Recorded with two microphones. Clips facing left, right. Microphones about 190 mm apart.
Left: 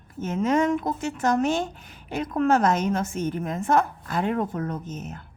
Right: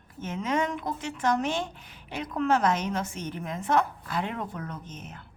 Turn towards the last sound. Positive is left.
turn(degrees=45)  # may be behind; listen again after turning